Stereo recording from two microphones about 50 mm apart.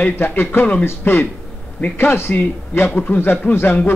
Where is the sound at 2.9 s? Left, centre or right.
Left.